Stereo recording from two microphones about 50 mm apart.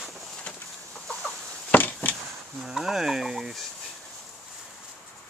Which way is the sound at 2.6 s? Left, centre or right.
Centre.